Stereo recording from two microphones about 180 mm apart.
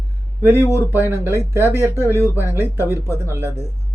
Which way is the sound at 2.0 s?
15° left (ahead or behind).